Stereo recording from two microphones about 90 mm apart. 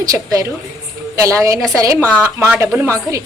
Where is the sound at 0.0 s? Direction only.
40° right (ahead or behind).